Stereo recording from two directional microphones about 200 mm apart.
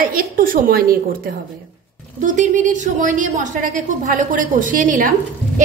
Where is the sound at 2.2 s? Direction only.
40° right (ahead or behind).